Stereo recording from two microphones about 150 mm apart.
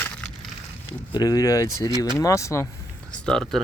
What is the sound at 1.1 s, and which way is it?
Speech, 25° left (ahead or behind).